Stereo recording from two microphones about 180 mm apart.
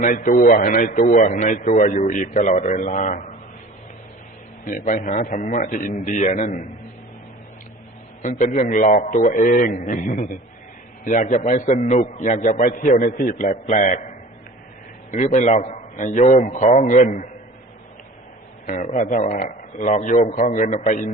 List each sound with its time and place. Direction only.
0.0 s a man's voice: 45° left (ahead or behind)
4.6 s a man's voice: 45° left (ahead or behind)
8.2 s a man's voice: 40° left (ahead or behind)
15.1 s a man's voice: 40° left (ahead or behind)
18.6 s a man's voice: 45° left (ahead or behind)